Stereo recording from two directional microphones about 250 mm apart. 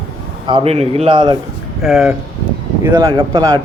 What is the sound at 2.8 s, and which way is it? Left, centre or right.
Speech, centre.